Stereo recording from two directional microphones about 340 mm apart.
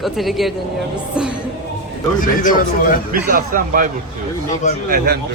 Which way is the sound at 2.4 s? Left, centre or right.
Left.